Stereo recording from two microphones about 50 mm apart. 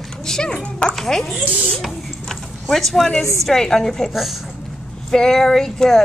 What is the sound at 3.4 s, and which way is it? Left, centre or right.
Speech, centre.